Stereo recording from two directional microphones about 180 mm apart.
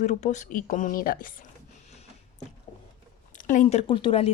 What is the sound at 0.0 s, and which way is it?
Speech, 40° left (ahead or behind).